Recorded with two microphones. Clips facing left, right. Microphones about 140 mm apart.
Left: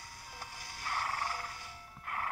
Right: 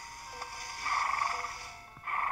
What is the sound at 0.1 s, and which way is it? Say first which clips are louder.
Music: right 4 dB; 45° right (ahead or behind).